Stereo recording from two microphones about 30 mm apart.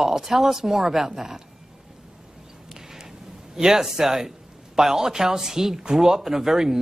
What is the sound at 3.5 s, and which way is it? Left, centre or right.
Speech, centre.